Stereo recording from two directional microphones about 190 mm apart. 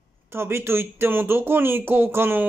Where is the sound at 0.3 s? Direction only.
15° right (ahead or behind).